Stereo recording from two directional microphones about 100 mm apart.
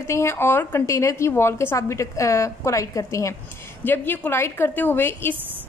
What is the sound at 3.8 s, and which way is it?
A woman's voice, 20° left (ahead or behind).